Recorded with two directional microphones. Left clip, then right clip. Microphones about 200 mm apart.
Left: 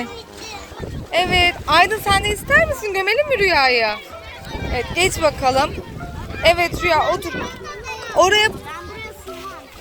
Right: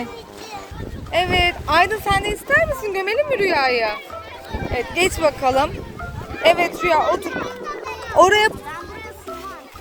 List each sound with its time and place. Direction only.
1.1 s speech: centre (ahead or behind)
4.7 s speech: 10° right (ahead or behind)
7.6 s children playing: 35° right (ahead or behind)
8.0 s a sound: 20° right (ahead or behind)